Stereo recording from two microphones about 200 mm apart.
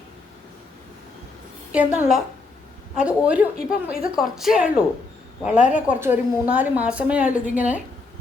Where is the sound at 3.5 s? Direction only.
45° left (ahead or behind).